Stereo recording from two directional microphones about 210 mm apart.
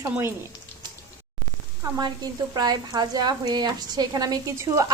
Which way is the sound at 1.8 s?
20° right (ahead or behind).